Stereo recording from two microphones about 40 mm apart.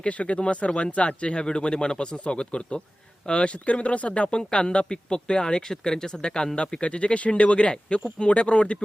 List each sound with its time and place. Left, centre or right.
0.0 s speech: left